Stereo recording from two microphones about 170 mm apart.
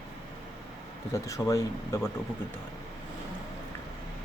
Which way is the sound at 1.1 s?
20° left (ahead or behind).